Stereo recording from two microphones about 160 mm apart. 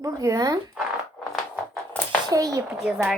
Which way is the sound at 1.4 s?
Centre (ahead or behind).